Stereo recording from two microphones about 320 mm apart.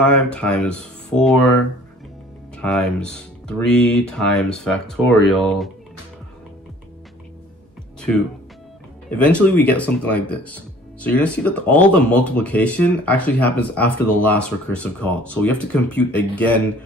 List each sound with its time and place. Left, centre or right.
0.0 s speech: centre
2.5 s speech: centre
9.1 s speech: centre